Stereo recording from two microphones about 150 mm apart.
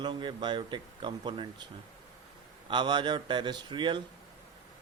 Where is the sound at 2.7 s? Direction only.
30° right (ahead or behind).